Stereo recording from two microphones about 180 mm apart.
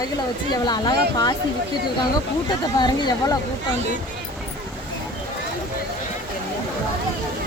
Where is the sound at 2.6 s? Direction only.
20° left (ahead or behind).